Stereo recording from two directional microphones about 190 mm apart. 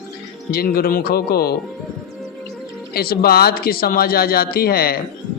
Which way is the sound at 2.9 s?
55° left (ahead or behind).